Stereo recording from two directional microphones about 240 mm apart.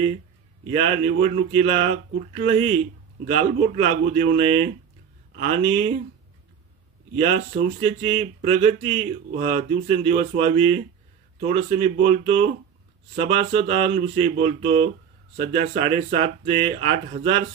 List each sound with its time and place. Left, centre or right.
0.7 s speech: right
7.2 s speech: right